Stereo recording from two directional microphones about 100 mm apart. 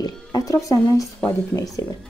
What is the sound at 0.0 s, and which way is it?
Speech, 40° left (ahead or behind).